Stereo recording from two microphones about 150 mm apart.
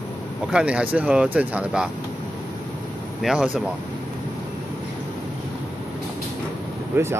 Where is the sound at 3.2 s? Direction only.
Centre (ahead or behind).